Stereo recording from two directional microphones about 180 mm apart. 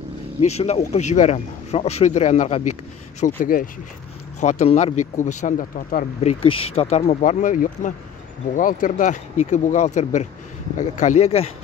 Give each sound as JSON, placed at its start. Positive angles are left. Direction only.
{"t": 0.4, "sound": "speech", "side_deg": 35}
{"t": 6.4, "sound": "speech", "side_deg": 30}